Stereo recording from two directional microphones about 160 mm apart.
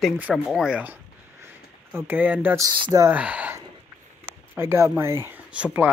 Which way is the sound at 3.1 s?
10° right (ahead or behind).